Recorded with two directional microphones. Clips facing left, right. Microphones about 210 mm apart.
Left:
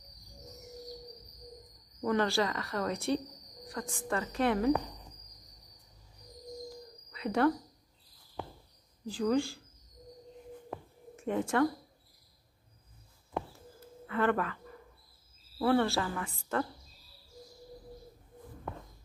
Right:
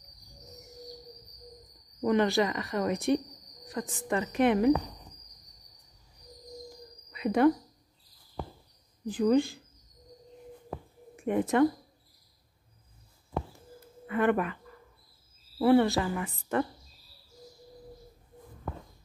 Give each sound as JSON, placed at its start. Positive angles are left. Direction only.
{"t": 2.0, "sound": "a woman's voice", "side_deg": -20}
{"t": 7.1, "sound": "a sound", "side_deg": -15}
{"t": 9.0, "sound": "a woman's voice", "side_deg": -20}
{"t": 11.1, "sound": "a woman's voice", "side_deg": -15}
{"t": 14.0, "sound": "speech", "side_deg": -15}
{"t": 15.6, "sound": "speech", "side_deg": -15}